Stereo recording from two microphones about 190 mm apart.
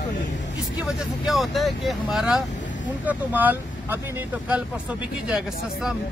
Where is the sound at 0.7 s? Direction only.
Centre (ahead or behind).